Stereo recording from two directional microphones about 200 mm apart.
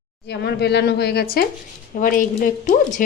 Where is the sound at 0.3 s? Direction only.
55° left (ahead or behind).